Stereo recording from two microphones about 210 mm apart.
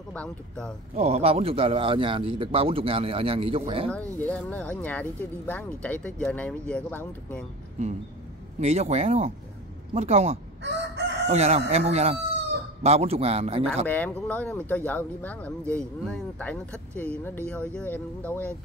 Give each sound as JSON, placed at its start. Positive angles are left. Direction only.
{"t": 0.1, "sound": "speech", "side_deg": 5}
{"t": 0.9, "sound": "speech", "side_deg": -30}
{"t": 4.2, "sound": "speech", "side_deg": 5}
{"t": 8.5, "sound": "speech", "side_deg": -30}
{"t": 10.6, "sound": "chicken", "side_deg": -55}
{"t": 11.2, "sound": "speech", "side_deg": -30}
{"t": 13.8, "sound": "speech", "side_deg": 5}